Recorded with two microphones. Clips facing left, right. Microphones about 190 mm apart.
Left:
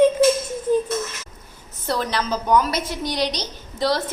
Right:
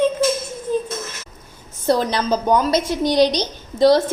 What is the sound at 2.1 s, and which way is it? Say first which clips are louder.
A woman's voice: right 2 dB; 20° right (ahead or behind).